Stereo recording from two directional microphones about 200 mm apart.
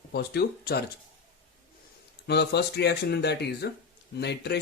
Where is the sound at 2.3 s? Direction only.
55° left (ahead or behind).